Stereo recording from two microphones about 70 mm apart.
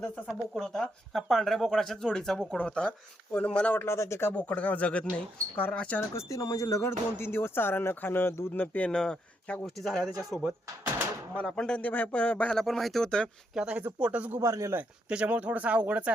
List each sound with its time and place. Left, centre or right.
0.3 s speech: centre
3.8 s speech: left
4.4 s speech: left
6.0 s speech: left
7.2 s speech: left
8.6 s speech: left
9.0 s speech: centre
11.3 s speech: centre
12.5 s speech: centre
13.5 s speech: centre
14.4 s speech: right
15.1 s speech: centre